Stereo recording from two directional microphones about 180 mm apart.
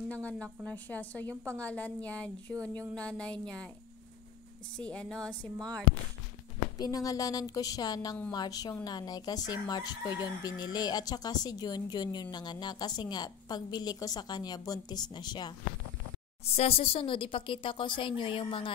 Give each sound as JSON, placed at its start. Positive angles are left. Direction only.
{"t": 0.1, "sound": "speech", "side_deg": 5}
{"t": 1.3, "sound": "a woman's voice", "side_deg": -15}
{"t": 1.6, "sound": "speech", "side_deg": 5}
{"t": 2.9, "sound": "a sound", "side_deg": 5}
{"t": 4.7, "sound": "speech", "side_deg": 5}
{"t": 6.8, "sound": "speech", "side_deg": 20}
{"t": 16.4, "sound": "speech", "side_deg": 35}